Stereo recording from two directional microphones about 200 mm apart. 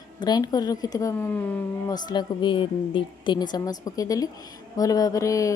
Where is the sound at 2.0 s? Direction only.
20° left (ahead or behind).